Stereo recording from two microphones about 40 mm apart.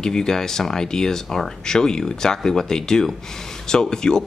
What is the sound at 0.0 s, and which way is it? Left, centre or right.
Speech, centre.